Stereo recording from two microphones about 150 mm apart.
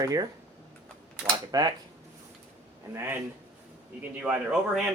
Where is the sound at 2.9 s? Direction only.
15° right (ahead or behind).